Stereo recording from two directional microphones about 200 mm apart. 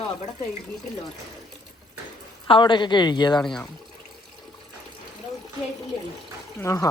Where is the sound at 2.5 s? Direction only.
25° left (ahead or behind).